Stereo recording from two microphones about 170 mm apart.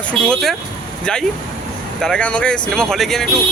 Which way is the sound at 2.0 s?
5° left (ahead or behind).